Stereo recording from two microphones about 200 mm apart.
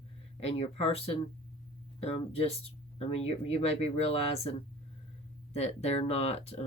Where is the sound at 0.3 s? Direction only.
30° left (ahead or behind).